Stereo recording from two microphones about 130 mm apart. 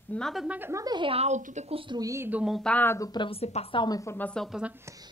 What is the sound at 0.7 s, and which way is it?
Speech, 30° right (ahead or behind).